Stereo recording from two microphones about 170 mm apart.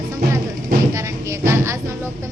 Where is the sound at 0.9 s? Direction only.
15° right (ahead or behind).